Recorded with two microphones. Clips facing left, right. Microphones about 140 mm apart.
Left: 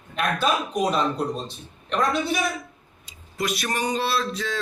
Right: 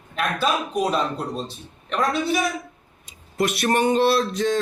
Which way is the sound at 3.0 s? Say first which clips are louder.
Right 5 dB; 55° right (ahead or behind).